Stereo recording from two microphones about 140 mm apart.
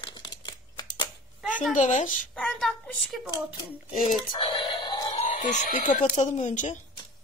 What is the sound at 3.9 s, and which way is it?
Speech, 75° left (ahead or behind).